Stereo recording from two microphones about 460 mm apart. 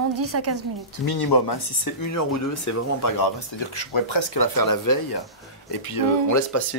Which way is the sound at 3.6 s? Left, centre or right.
Left.